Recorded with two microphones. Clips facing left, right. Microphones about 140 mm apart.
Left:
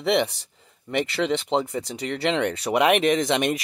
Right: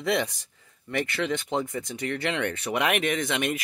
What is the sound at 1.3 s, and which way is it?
Speech, 30° left (ahead or behind).